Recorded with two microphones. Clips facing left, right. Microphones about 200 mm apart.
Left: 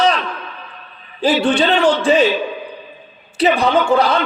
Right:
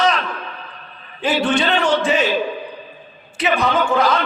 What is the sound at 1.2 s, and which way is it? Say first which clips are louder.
Speech: left 3 dB; 35° left (ahead or behind).